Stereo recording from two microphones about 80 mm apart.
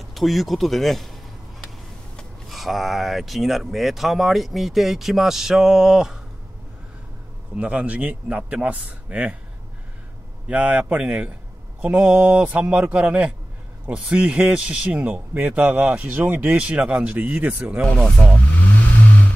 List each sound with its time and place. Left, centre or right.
0.0 s speech: centre
2.5 s speech: centre
7.5 s a man's voice: centre
10.5 s a man's voice: centre
17.8 s speech: centre